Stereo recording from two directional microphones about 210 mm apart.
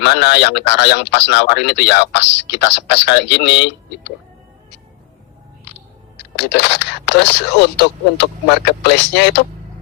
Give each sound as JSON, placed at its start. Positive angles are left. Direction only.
{"t": 0.0, "sound": "speech", "side_deg": 50}
{"t": 6.1, "sound": "speech", "side_deg": 55}